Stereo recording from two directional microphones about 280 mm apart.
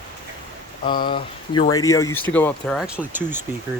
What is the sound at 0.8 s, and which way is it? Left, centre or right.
Speech, centre.